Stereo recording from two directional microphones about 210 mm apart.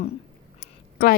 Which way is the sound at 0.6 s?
40° left (ahead or behind).